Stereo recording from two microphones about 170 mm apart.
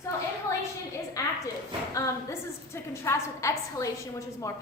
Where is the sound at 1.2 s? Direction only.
20° left (ahead or behind).